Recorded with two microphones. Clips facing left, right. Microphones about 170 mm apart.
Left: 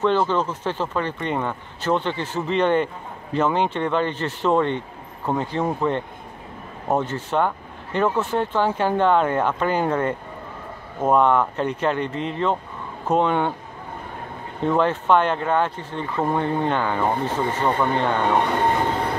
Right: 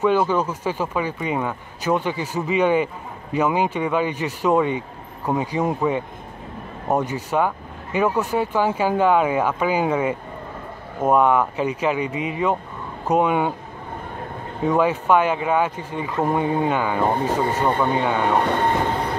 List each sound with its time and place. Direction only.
0.0 s speech: 10° right (ahead or behind)
14.6 s speech: 5° right (ahead or behind)